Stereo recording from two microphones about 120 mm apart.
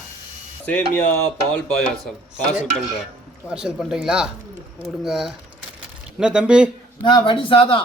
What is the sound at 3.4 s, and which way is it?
Speech, 5° right (ahead or behind).